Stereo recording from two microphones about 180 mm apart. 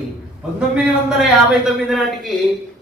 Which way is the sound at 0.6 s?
5° right (ahead or behind).